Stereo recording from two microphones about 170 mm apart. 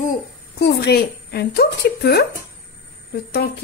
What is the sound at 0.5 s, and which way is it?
A woman's voice, 70° left (ahead or behind).